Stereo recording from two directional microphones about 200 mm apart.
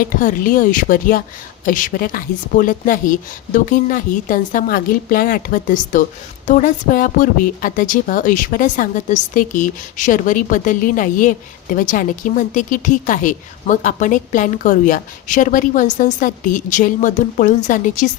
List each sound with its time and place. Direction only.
0.0 s a woman's voice: 45° left (ahead or behind)